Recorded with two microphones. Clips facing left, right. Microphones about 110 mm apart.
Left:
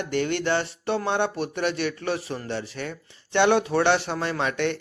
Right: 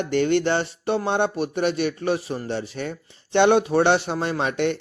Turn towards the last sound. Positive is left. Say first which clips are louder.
# right 2 dB
turn(degrees=-15)  # may be behind; listen again after turning